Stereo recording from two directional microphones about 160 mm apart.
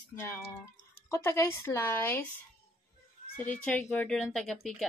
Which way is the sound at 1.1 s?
15° left (ahead or behind).